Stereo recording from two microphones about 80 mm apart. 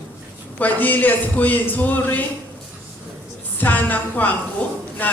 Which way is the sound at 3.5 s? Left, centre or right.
Left.